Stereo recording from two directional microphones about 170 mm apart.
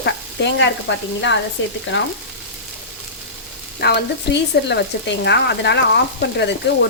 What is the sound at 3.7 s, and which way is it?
Speech, 75° left (ahead or behind).